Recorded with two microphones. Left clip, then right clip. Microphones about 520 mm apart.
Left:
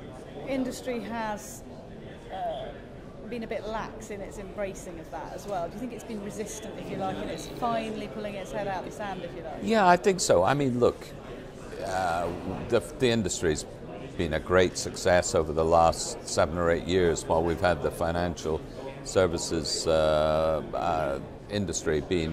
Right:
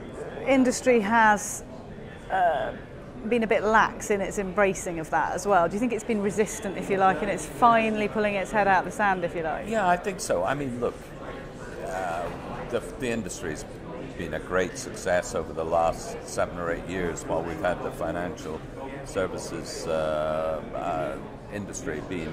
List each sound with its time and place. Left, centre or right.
0.5 s a woman's voice: right
3.3 s a woman's voice: right
9.8 s a man's voice: left
11.9 s a man's voice: left